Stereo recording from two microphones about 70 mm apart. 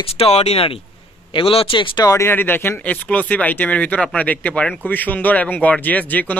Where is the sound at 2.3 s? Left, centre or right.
Left.